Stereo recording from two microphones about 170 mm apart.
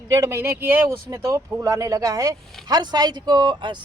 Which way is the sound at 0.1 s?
15° right (ahead or behind).